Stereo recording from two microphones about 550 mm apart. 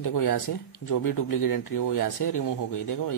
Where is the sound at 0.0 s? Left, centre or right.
Left.